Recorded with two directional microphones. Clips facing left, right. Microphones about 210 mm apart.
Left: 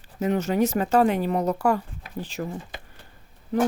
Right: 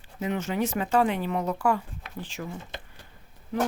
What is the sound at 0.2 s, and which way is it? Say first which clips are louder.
Speech: left 5 dB; 40° left (ahead or behind).